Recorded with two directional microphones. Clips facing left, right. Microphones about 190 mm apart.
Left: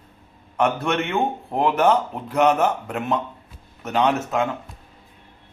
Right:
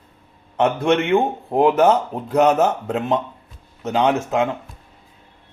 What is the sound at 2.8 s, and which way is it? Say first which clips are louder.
A man's voice: right 4 dB; 25° right (ahead or behind).